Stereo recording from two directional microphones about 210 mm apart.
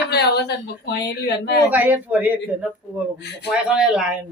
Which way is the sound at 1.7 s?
10° right (ahead or behind).